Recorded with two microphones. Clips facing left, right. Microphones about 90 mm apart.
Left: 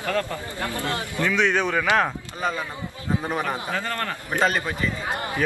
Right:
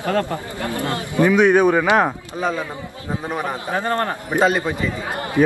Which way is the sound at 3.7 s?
25° right (ahead or behind).